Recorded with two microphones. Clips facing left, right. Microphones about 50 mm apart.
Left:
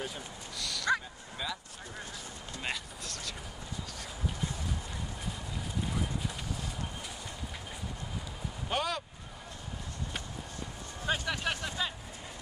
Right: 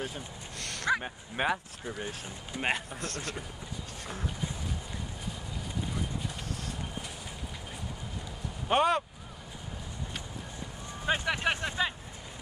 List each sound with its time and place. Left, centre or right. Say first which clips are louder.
0.0 s dog: right 2 dB; right
1.0 s speech: right 9 dB; right
2.6 s speech: right 7 dB; right
8.6 s speech: right 8 dB; right
11.1 s vehicle: right 4 dB; right